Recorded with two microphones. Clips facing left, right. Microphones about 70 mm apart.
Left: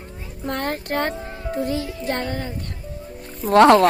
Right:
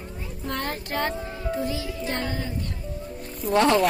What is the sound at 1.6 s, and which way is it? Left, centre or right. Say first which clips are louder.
Music: left 4 dB; left.